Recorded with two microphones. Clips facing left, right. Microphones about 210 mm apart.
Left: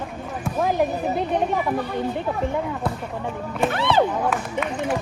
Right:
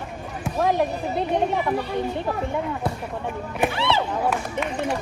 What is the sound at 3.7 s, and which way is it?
Speech, 50° left (ahead or behind).